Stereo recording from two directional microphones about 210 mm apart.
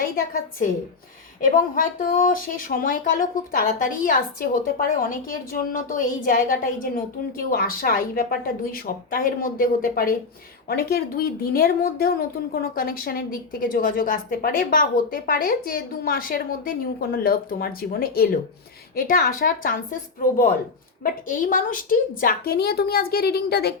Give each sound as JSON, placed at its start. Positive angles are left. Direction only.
{"t": 1.4, "sound": "a woman's voice", "side_deg": 40}
{"t": 21.0, "sound": "a woman's voice", "side_deg": 40}